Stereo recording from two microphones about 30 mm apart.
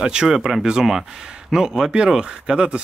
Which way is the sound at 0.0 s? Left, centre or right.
Right.